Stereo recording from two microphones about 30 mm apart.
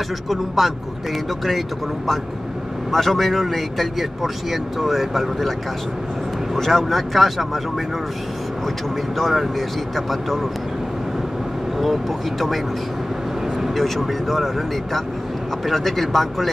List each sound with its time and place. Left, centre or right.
0.3 s a man's voice: centre
2.9 s a man's voice: centre
6.5 s a man's voice: centre
9.2 s a man's voice: centre
11.8 s a man's voice: centre
13.7 s a man's voice: centre